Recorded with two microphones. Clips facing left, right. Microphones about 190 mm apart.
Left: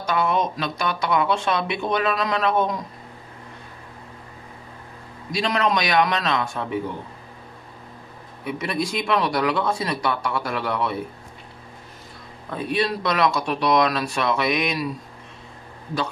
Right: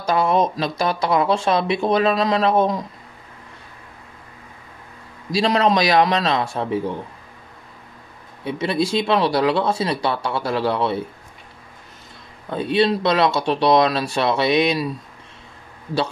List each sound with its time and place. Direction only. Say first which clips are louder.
0.0 s speech: right 4 dB; 35° right (ahead or behind)
5.3 s speech: right 5 dB; 30° right (ahead or behind)
8.5 s speech: right 5 dB; 30° right (ahead or behind)
12.4 s speech: right 5 dB; 25° right (ahead or behind)